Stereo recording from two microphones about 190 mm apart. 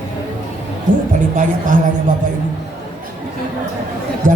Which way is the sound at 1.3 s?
40° right (ahead or behind).